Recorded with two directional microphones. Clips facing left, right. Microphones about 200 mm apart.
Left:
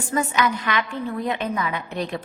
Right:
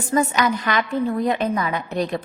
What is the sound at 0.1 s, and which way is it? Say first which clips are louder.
A woman's voice: right 3 dB; 40° right (ahead or behind).